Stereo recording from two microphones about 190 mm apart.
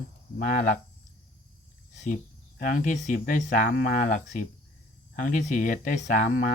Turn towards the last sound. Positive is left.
turn(degrees=45)  # may be behind; listen again after turning